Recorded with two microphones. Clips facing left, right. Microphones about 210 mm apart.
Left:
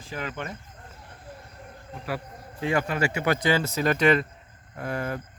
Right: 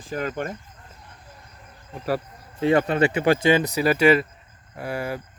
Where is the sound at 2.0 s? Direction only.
35° right (ahead or behind).